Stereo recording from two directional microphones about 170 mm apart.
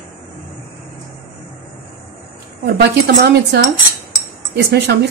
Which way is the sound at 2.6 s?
70° right (ahead or behind).